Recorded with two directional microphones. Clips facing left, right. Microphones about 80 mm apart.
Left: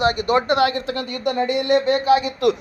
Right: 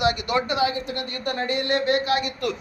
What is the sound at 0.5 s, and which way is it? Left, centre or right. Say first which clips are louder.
Speech: left 4 dB; left.